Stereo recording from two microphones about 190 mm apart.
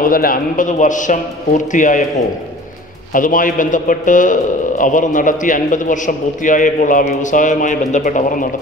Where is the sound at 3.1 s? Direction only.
45° left (ahead or behind).